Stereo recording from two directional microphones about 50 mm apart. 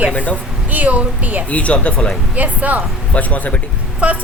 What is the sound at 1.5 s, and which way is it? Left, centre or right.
Speech, left.